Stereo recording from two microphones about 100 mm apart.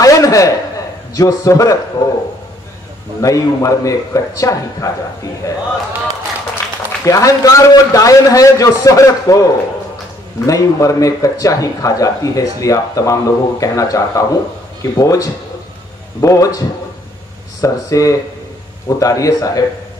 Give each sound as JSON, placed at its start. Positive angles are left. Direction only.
{"t": 0.0, "sound": "a sound", "side_deg": 35}
{"t": 1.1, "sound": "speech", "side_deg": 35}
{"t": 3.2, "sound": "speech", "side_deg": 35}
{"t": 7.1, "sound": "speech", "side_deg": 35}